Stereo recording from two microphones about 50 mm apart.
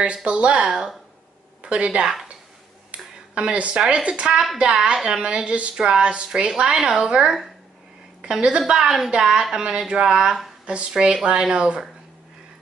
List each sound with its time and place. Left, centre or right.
0.0 s a woman's voice: right
3.3 s a woman's voice: right
10.9 s a woman's voice: centre